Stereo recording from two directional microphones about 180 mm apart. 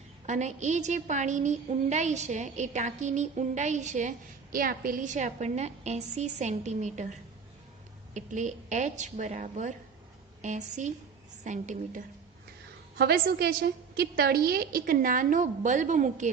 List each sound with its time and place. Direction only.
0.3 s a woman's voice: 40° right (ahead or behind)
4.5 s a woman's voice: 50° right (ahead or behind)
13.0 s a woman's voice: 65° right (ahead or behind); by 16.3 s 45° right (ahead or behind)